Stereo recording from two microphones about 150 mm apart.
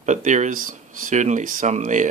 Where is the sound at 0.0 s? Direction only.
55° right (ahead or behind).